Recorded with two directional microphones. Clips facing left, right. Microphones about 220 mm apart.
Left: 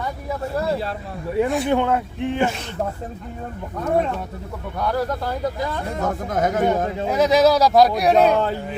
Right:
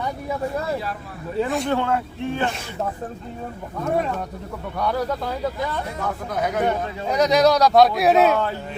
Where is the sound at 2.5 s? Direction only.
5° right (ahead or behind).